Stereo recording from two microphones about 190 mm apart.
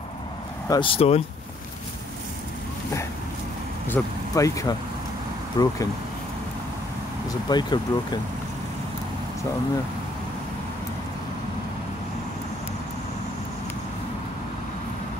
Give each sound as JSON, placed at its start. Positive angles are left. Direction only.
{"t": 0.7, "sound": "speech", "side_deg": 25}
{"t": 3.9, "sound": "speech", "side_deg": 15}
{"t": 7.4, "sound": "speech", "side_deg": 20}